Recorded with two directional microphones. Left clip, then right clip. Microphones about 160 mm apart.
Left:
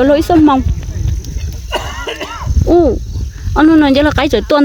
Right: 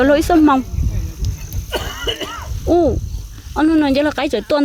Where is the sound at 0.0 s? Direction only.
30° left (ahead or behind).